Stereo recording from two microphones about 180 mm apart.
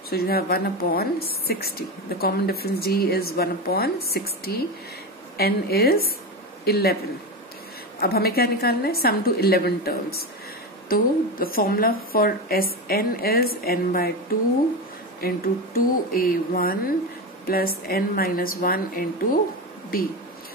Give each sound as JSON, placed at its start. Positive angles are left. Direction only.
{"t": 0.1, "sound": "speech", "side_deg": 60}
{"t": 8.0, "sound": "speech", "side_deg": 60}
{"t": 15.1, "sound": "speech", "side_deg": 55}